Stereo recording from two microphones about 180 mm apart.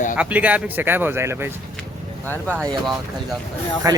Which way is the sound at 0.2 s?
10° right (ahead or behind).